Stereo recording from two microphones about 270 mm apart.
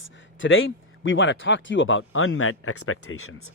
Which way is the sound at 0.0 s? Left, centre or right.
Left.